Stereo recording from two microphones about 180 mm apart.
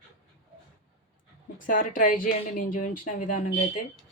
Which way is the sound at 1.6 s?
50° left (ahead or behind).